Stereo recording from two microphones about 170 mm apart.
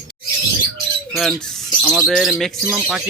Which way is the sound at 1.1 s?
Centre (ahead or behind).